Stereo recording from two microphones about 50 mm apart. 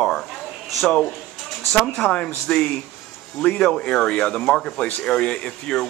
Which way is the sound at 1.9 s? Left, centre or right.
Left.